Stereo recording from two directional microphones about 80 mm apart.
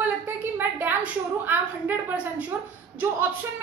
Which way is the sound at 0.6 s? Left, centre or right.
Right.